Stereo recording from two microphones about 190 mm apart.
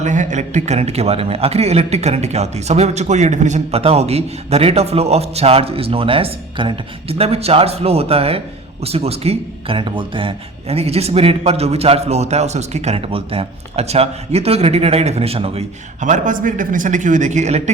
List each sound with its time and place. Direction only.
0.0 s speech: 40° right (ahead or behind)